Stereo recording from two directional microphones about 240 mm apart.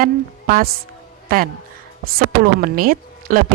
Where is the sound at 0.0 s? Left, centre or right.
Right.